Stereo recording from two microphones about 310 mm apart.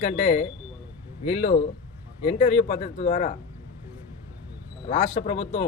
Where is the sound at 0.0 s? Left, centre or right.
Left.